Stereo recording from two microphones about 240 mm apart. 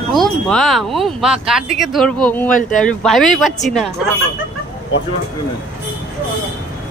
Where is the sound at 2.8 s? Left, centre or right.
Centre.